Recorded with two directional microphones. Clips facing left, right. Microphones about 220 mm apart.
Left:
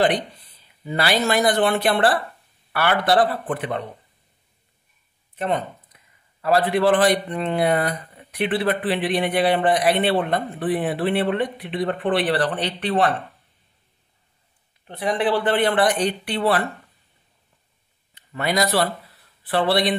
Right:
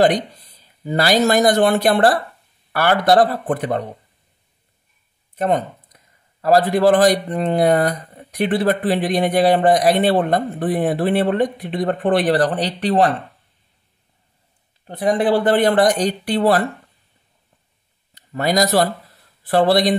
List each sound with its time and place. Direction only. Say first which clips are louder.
0.8 s speech: right 5 dB; 40° right (ahead or behind)
5.3 s speech: right 5 dB; 45° right (ahead or behind)
14.9 s speech: right 5 dB; 45° right (ahead or behind)
18.1 s speech: right 4 dB; 40° right (ahead or behind)